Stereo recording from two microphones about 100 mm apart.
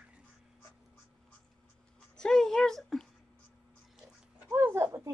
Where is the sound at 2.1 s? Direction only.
5° left (ahead or behind).